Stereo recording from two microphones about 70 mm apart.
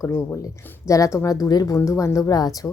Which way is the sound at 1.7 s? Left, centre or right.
Left.